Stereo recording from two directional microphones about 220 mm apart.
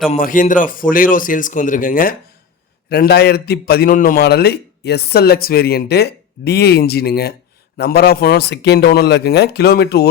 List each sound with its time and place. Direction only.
0.1 s a man's voice: 40° left (ahead or behind)